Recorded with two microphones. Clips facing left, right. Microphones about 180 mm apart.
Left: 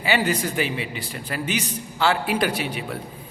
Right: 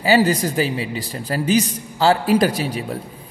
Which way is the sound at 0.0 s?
35° right (ahead or behind).